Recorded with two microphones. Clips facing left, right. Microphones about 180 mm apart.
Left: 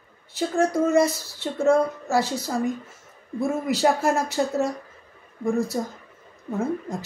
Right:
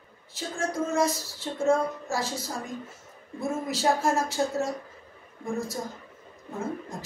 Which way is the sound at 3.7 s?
65° left (ahead or behind).